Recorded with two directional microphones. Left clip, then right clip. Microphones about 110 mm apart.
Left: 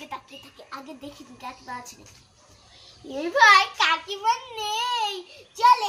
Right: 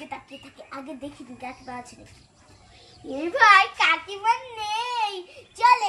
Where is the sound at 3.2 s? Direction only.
20° right (ahead or behind).